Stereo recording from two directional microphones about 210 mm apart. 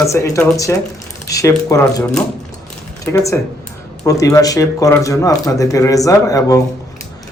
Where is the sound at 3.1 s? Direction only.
15° left (ahead or behind).